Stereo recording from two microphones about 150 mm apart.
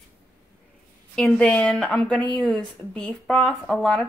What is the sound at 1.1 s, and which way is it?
A woman's voice, 5° left (ahead or behind).